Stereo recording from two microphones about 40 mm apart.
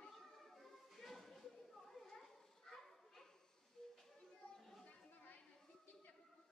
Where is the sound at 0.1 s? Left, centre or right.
Centre.